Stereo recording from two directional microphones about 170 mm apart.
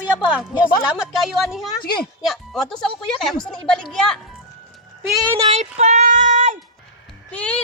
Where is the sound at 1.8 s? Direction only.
65° left (ahead or behind).